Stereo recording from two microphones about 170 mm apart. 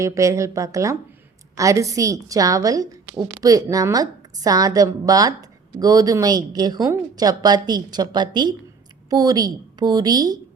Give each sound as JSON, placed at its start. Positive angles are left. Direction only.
{"t": 0.0, "sound": "a woman's voice", "side_deg": -20}